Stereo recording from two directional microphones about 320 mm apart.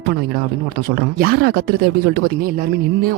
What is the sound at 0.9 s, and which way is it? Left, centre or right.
Speech, right.